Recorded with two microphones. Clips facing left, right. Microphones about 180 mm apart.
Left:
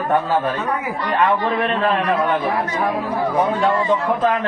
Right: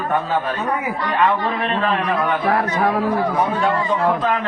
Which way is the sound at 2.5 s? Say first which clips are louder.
Right 2 dB; 70° right (ahead or behind).